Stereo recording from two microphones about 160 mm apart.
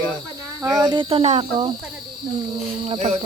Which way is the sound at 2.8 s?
40° right (ahead or behind).